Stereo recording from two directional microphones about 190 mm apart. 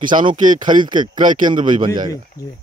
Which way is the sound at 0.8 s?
25° right (ahead or behind).